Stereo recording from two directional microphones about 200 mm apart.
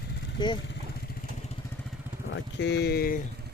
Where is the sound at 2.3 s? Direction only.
65° left (ahead or behind).